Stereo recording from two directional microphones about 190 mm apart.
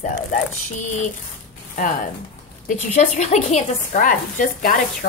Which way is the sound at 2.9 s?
35° left (ahead or behind).